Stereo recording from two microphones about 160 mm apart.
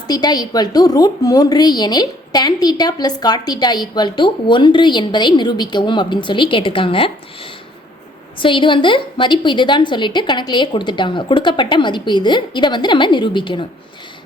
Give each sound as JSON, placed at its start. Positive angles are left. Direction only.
{"t": 0.1, "sound": "a woman's voice", "side_deg": 25}